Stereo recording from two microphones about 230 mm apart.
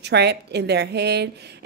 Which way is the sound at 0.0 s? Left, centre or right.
Right.